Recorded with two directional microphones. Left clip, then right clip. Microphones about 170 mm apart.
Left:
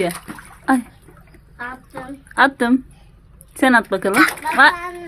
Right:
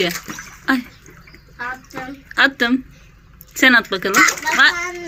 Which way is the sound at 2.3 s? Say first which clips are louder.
Even; 40° left (ahead or behind).